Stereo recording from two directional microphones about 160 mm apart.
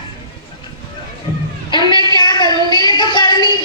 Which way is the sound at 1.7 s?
30° left (ahead or behind).